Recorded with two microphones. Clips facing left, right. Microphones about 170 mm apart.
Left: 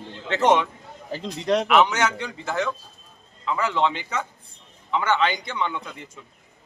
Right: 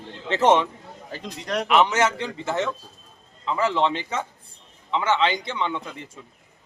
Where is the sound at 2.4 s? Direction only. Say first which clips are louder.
Even; 25° right (ahead or behind).